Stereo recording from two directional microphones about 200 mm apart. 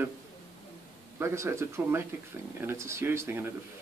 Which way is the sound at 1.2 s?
15° right (ahead or behind).